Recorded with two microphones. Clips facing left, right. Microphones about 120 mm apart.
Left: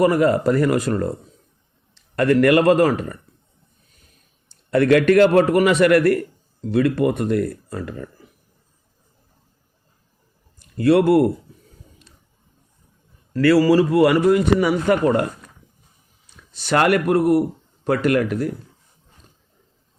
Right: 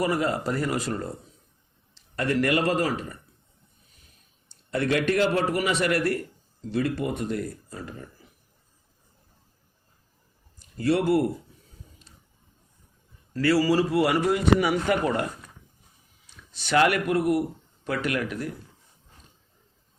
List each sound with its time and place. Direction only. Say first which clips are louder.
0.0 s a man's voice: left 9 dB; 55° left (ahead or behind)
4.7 s a man's voice: left 10 dB; 65° left (ahead or behind)
10.8 s a man's voice: left 8 dB; 65° left (ahead or behind)
13.3 s a man's voice: left 7 dB; 60° left (ahead or behind)
14.6 s speech: left 6 dB; 45° left (ahead or behind)
16.4 s a sound: left 2 dB; 55° left (ahead or behind)
16.7 s speech: left 5 dB; 50° left (ahead or behind)